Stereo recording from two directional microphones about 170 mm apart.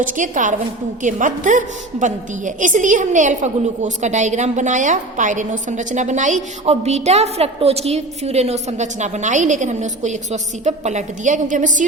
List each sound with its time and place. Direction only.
0.0 s a woman's voice: 50° right (ahead or behind)